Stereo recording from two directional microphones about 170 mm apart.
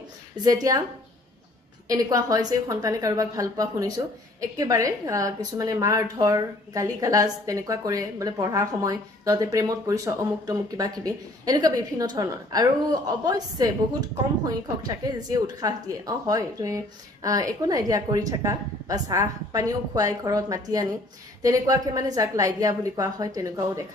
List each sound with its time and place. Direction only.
0.4 s a woman's voice: 20° right (ahead or behind)
1.9 s a woman's voice: 20° right (ahead or behind)
15.1 s a woman's voice: 20° right (ahead or behind)